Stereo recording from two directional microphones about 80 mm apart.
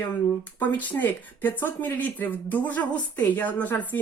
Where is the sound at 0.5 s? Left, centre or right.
Left.